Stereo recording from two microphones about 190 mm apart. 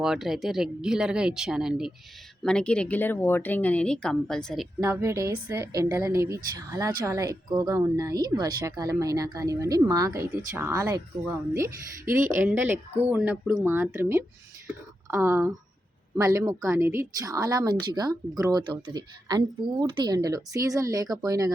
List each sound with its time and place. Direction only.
0.0 s speech: centre (ahead or behind)
4.8 s a woman's voice: 15° right (ahead or behind)